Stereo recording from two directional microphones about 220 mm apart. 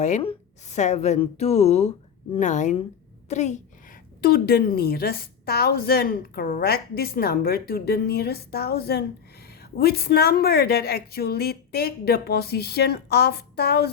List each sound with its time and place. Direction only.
0.0 s a woman's voice: 30° left (ahead or behind)
4.2 s a woman's voice: 45° left (ahead or behind)